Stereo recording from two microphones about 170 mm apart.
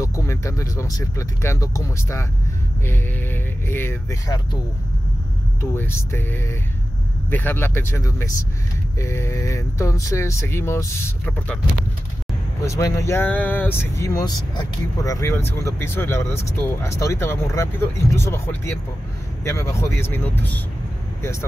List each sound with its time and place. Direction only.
0.0 s speech: 15° left (ahead or behind)
5.6 s speech: 15° left (ahead or behind)
12.7 s speech: 15° left (ahead or behind)